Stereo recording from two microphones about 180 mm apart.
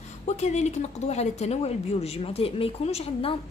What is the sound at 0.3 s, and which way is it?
A woman's voice, 40° left (ahead or behind).